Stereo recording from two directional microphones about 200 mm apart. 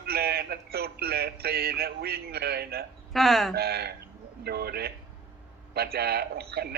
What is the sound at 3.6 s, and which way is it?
Speech, 50° right (ahead or behind).